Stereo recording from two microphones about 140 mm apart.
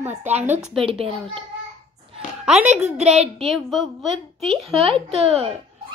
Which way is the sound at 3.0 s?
50° right (ahead or behind).